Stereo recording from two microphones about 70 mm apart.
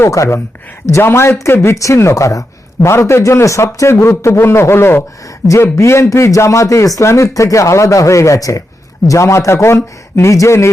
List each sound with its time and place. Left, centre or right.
0.0 s a man's voice: left